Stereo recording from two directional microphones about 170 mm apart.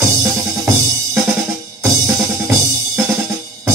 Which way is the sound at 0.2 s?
20° right (ahead or behind).